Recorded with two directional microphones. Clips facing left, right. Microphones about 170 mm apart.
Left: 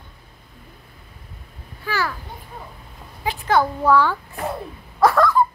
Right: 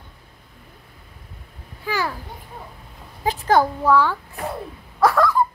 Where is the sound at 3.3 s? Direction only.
40° right (ahead or behind).